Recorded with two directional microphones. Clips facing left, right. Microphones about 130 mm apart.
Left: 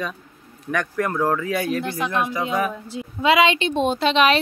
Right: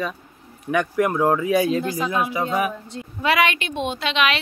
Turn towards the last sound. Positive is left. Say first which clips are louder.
# left 5 dB
turn(degrees=35)  # may be behind; listen again after turning